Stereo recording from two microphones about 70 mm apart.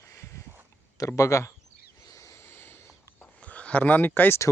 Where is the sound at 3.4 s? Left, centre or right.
Centre.